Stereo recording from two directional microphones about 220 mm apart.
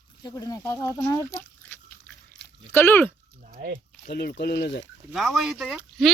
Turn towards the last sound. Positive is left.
turn(degrees=0)  # may be behind; listen again after turning